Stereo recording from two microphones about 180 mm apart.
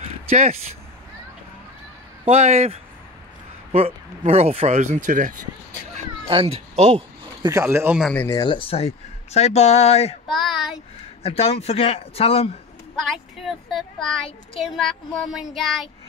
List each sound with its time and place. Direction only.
0.3 s speech: 35° right (ahead or behind)
2.2 s speech: 35° right (ahead or behind)
6.2 s speech: 30° right (ahead or behind)
7.4 s speech: 15° right (ahead or behind)
8.0 s speech: 10° left (ahead or behind)
8.4 s speech: 30° left (ahead or behind)
10.2 s a sound: centre (ahead or behind)
11.2 s speech: 35° left (ahead or behind)
13.0 s speech: centre (ahead or behind)